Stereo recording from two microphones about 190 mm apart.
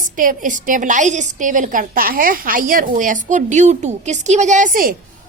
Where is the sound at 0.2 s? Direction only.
45° right (ahead or behind).